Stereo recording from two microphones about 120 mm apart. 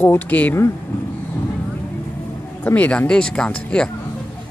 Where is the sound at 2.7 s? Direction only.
10° left (ahead or behind).